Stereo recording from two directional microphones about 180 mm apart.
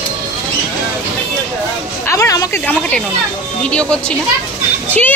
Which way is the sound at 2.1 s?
15° left (ahead or behind).